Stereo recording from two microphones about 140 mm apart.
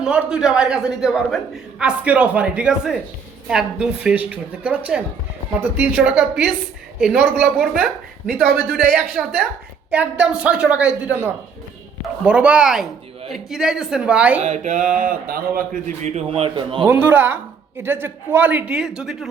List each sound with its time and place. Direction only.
0.0 s a woman's voice: 5° right (ahead or behind)
14.4 s a sound: 55° right (ahead or behind); by 15.8 s 85° right
16.0 s a man's voice: 50° right (ahead or behind)
16.8 s a woman's voice: 15° right (ahead or behind)